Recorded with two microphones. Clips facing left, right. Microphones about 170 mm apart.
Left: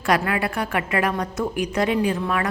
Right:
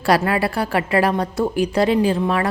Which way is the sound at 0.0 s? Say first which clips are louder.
Right 4 dB; 35° right (ahead or behind).